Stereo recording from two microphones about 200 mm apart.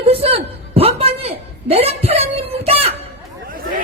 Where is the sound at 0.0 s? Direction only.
30° right (ahead or behind).